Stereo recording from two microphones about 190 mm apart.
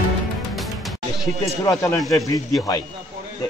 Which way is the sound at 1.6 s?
15° left (ahead or behind).